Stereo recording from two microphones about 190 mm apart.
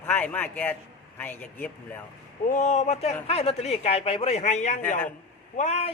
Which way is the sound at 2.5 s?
40° left (ahead or behind).